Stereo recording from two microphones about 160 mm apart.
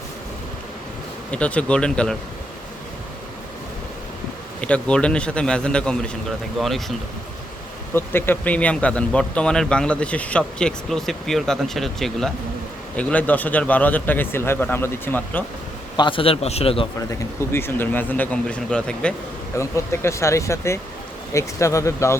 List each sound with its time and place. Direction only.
1.3 s speech: 10° left (ahead or behind)
4.6 s speech: 5° left (ahead or behind)
7.9 s speech: 15° left (ahead or behind)
16.0 s a man's voice: 30° left (ahead or behind)
17.1 s speech: 15° left (ahead or behind)
19.5 s speech: 15° left (ahead or behind)